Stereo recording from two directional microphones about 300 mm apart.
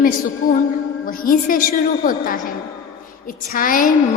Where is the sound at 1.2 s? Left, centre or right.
Left.